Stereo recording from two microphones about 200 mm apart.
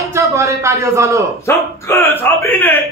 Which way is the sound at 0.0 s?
15° right (ahead or behind).